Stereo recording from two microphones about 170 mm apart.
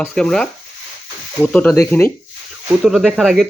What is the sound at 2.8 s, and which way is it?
Speech, centre (ahead or behind).